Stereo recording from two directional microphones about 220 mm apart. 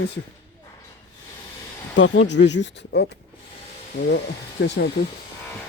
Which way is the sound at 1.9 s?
60° left (ahead or behind).